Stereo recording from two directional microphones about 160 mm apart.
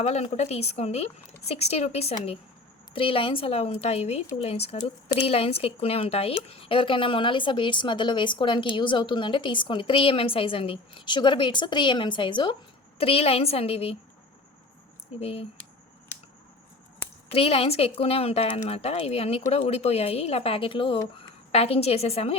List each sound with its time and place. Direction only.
0.0 s speech: 40° left (ahead or behind)
15.2 s speech: 35° left (ahead or behind)
17.2 s speech: 40° left (ahead or behind)